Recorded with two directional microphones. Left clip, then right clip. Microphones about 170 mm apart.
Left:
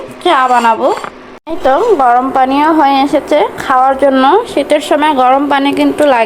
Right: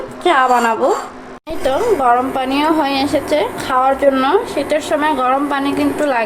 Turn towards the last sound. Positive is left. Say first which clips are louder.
# left 7 dB
turn(degrees=35)  # may be behind; listen again after turning